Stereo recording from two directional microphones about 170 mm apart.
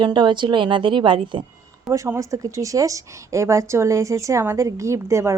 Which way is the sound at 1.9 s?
20° right (ahead or behind).